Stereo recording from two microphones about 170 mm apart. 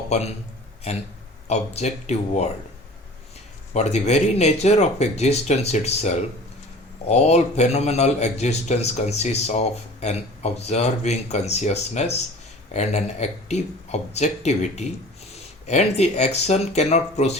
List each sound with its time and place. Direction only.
0.1 s speech: 40° left (ahead or behind)
1.5 s speech: 40° left (ahead or behind)
3.7 s speech: 40° left (ahead or behind)